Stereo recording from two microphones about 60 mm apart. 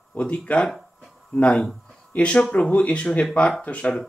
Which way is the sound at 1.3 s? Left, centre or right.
Centre.